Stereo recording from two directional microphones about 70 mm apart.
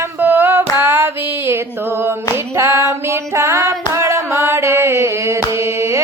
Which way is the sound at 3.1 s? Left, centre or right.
Right.